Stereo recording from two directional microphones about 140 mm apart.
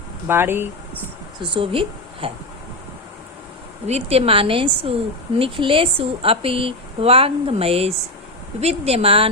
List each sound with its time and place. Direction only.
0.3 s speech: 15° right (ahead or behind)
1.4 s speech: 40° right (ahead or behind)
3.8 s a woman's voice: 45° right (ahead or behind)